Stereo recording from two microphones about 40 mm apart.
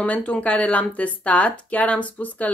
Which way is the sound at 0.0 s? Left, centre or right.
Left.